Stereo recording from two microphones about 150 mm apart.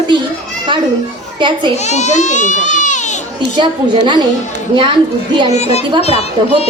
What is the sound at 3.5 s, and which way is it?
A woman's voice, 30° right (ahead or behind).